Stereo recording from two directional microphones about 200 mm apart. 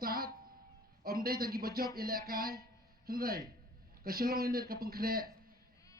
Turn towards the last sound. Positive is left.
turn(degrees=-50)  # may be behind; listen again after turning